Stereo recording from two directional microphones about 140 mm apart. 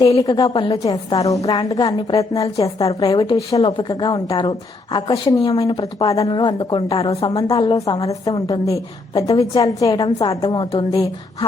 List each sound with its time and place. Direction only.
0.3 s a woman's voice: 30° left (ahead or behind)
0.5 s a woman's voice: 40° left (ahead or behind)
0.9 s a woman's voice: 25° left (ahead or behind); by 7.3 s 40° left (ahead or behind)
7.3 s a woman's voice: 25° left (ahead or behind)
10.7 s a woman's voice: 40° left (ahead or behind)